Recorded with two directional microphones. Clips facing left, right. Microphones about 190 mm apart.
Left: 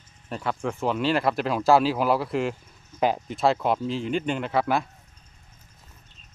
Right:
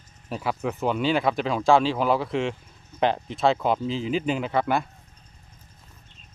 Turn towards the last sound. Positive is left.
turn(degrees=0)  # may be behind; listen again after turning